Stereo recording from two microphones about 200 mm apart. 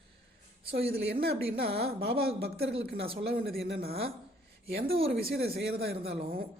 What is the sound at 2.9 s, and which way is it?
Speech, 30° right (ahead or behind).